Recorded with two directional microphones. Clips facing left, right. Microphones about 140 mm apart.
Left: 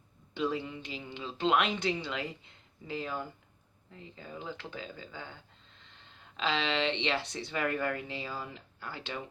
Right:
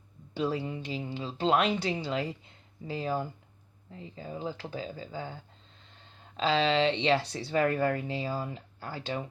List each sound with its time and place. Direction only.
0.3 s speech: 35° right (ahead or behind)